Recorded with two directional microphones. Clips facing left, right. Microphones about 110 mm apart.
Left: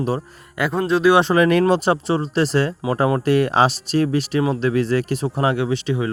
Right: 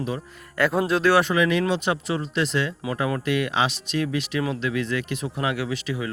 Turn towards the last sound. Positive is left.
turn(degrees=30)  # may be behind; listen again after turning